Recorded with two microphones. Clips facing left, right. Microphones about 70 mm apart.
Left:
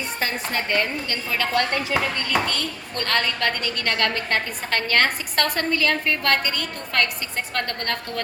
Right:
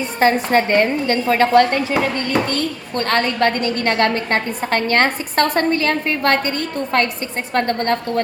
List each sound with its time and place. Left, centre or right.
0.2 s a woman's voice: right